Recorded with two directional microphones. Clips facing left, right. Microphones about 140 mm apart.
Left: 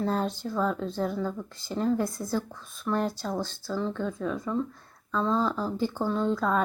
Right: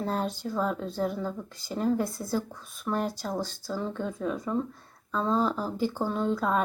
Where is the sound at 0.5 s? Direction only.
5° right (ahead or behind).